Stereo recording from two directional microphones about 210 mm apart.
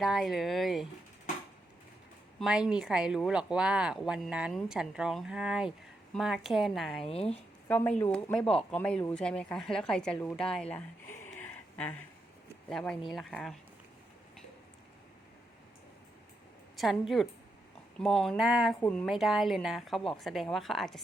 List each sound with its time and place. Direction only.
0.0 s speech: centre (ahead or behind)
2.4 s speech: 5° right (ahead or behind)
7.0 s speech: 30° left (ahead or behind)
7.7 s speech: 5° left (ahead or behind)
16.7 s speech: centre (ahead or behind)